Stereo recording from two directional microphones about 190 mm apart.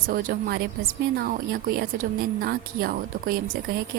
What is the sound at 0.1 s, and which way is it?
A woman's voice, 50° right (ahead or behind).